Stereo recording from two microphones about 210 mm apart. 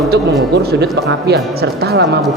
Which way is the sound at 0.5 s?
50° right (ahead or behind).